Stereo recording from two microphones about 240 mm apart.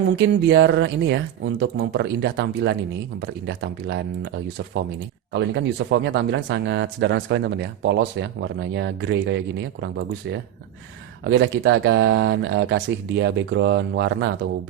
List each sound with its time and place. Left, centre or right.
0.2 s speech: right
5.3 s speech: right
11.2 s speech: right